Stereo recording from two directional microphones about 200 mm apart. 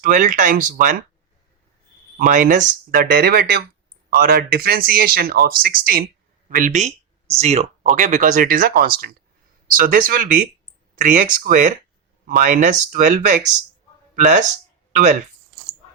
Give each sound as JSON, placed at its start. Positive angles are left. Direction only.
{"t": 0.0, "sound": "speech", "side_deg": -40}
{"t": 2.1, "sound": "speech", "side_deg": -40}